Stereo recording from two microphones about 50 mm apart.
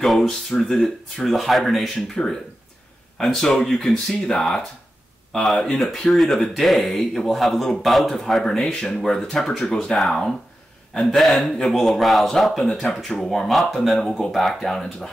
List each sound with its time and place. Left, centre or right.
0.0 s speech: centre
2.2 s speech: centre